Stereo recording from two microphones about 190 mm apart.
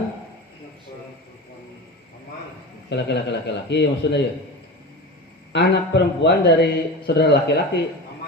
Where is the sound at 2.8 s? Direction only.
65° left (ahead or behind).